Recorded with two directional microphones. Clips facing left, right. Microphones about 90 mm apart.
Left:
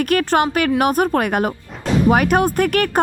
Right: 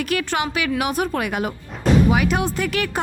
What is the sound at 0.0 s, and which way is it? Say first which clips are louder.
A woman's voice: left 6 dB; 50° left (ahead or behind).